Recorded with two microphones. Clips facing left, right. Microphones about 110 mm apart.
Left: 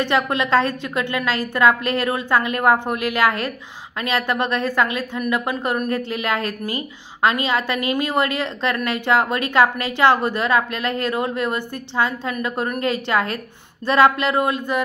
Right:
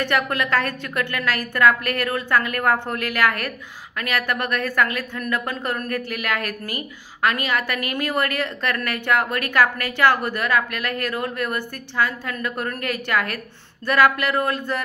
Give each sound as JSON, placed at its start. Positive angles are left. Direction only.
{"t": 0.0, "sound": "a woman's voice", "side_deg": 20}